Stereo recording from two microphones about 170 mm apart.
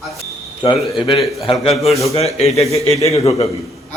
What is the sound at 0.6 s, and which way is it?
A man's voice, 30° left (ahead or behind).